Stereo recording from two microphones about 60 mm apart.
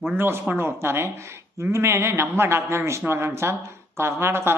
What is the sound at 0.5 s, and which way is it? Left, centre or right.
A man's voice, right.